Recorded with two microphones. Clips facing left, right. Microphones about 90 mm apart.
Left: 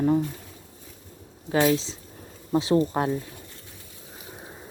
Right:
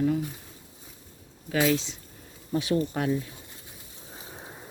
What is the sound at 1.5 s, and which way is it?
Speech, 30° left (ahead or behind).